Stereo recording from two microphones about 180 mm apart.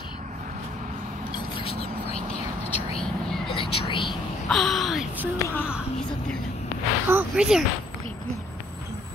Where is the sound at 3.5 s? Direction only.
30° left (ahead or behind).